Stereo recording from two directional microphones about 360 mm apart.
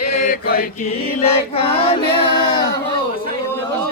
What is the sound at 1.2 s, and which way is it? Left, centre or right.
Female singing, centre.